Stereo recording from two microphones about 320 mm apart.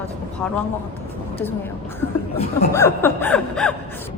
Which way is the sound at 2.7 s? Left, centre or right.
Centre.